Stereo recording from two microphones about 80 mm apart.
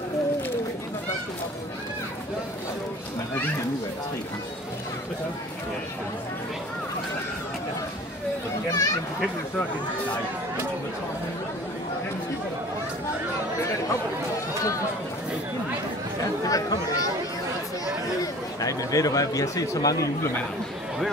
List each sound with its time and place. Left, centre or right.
8.6 s a sound: left
16.4 s speech: left
18.2 s speech: left